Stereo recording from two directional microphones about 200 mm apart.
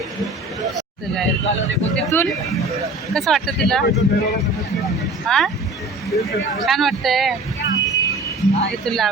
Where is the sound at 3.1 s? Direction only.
Centre (ahead or behind).